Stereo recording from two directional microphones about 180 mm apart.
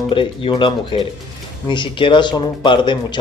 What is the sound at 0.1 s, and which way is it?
Speech, 30° left (ahead or behind).